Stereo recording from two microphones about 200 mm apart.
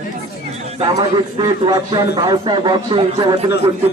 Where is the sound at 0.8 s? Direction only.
20° right (ahead or behind).